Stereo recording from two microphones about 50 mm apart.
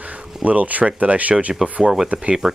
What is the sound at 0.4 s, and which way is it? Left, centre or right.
Speech, right.